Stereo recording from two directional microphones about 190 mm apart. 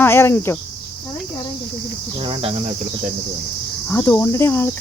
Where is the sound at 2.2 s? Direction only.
30° right (ahead or behind).